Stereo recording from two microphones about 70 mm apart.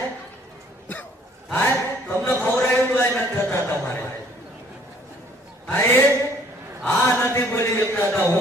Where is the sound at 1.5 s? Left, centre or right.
Left.